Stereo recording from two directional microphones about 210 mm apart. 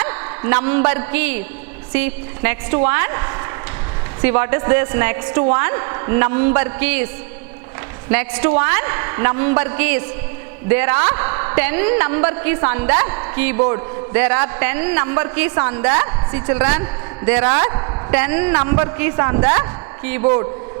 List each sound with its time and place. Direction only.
0.0 s a man's voice: 15° right (ahead or behind)
8.1 s a man's voice: 15° right (ahead or behind)